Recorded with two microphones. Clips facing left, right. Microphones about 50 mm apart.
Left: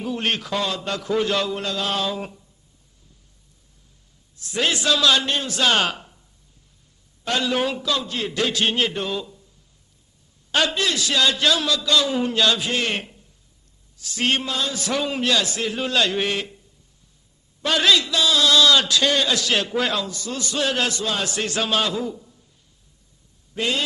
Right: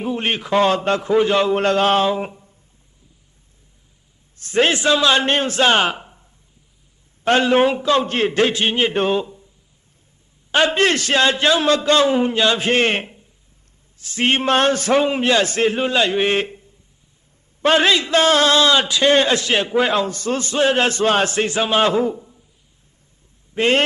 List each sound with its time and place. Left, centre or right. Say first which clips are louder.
0.0 s a man's voice: right 3 dB; right
0.5 s a man's voice: right 9 dB; right
1.5 s a man's voice: right 9 dB; right
4.4 s a man's voice: right 6 dB; right
7.3 s a man's voice: right 8 dB; right
8.6 s a man's voice: right 3 dB; right
8.9 s a man's voice: right 8 dB; right
10.5 s a man's voice: right 6 dB; right
12.5 s a man's voice: right 7 dB; right
14.4 s a man's voice: right 10 dB; right
16.3 s a man's voice: right 7 dB; right
18.2 s a man's voice: right 6 dB; right
19.0 s a man's voice: right 6 dB; right
23.6 s a man's voice: right 8 dB; right